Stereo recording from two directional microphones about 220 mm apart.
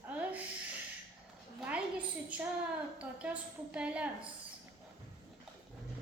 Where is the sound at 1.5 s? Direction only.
5° right (ahead or behind).